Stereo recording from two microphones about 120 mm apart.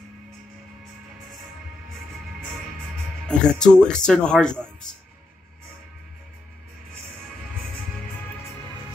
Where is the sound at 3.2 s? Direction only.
5° left (ahead or behind).